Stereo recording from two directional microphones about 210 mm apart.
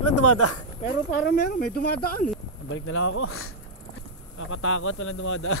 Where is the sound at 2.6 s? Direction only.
70° left (ahead or behind).